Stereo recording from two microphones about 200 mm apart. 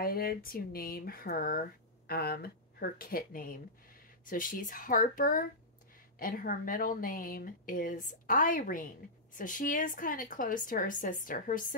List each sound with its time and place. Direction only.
0.0 s speech: 50° left (ahead or behind)